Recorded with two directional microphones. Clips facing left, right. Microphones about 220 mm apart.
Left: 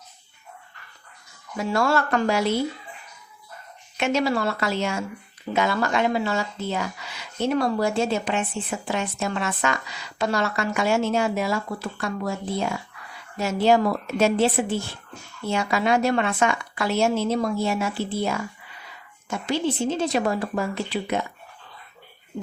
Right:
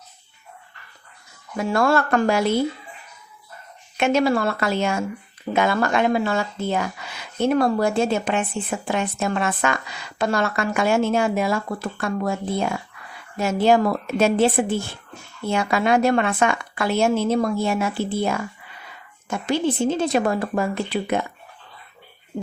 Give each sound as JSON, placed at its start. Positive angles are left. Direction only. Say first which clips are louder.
{"t": 1.7, "sound": "speech", "louder": "right 3 dB", "side_deg": -55}
{"t": 3.9, "sound": "speech", "louder": "right 4 dB", "side_deg": -55}